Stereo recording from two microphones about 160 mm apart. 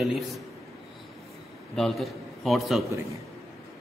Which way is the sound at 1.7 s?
Centre (ahead or behind).